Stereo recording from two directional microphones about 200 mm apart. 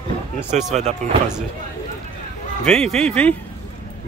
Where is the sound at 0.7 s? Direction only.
35° right (ahead or behind).